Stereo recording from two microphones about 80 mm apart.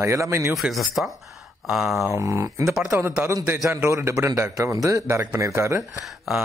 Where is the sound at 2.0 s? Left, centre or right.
Right.